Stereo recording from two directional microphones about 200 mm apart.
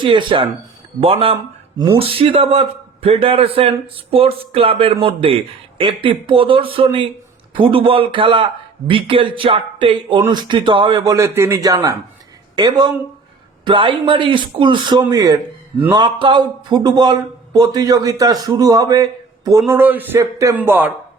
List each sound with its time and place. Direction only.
0.0 s a man's voice: 25° right (ahead or behind); by 20.9 s 10° right (ahead or behind)